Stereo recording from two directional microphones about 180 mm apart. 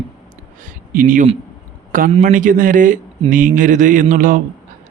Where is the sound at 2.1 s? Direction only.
45° right (ahead or behind).